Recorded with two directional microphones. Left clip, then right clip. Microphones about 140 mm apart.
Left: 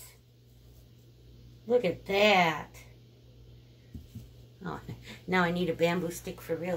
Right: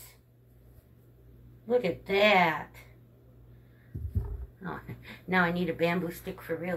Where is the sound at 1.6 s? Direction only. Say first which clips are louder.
Left 1 dB; 35° left (ahead or behind).